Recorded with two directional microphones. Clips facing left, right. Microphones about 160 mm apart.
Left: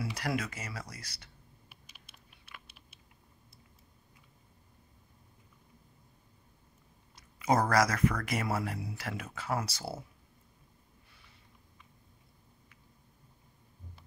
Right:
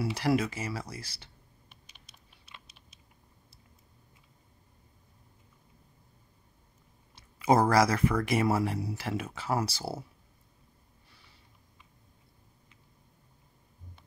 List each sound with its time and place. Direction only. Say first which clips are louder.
0.0 s speech: right 7 dB; 30° right (ahead or behind)
1.7 s patter: even; 5° left (ahead or behind)
7.2 s speech: right 4 dB; 30° right (ahead or behind)